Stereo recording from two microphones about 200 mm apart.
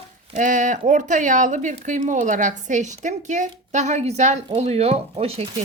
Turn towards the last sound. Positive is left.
turn(degrees=-30)  # may be behind; listen again after turning